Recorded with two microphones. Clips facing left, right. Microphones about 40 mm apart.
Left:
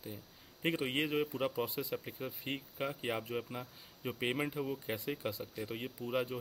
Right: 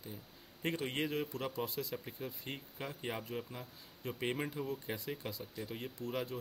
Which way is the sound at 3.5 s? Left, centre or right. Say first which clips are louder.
Left 4 dB; left.